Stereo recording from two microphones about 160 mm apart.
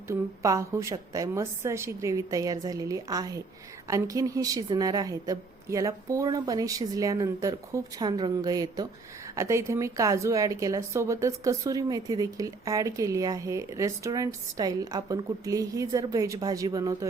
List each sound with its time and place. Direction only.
0.1 s a woman's voice: 20° right (ahead or behind)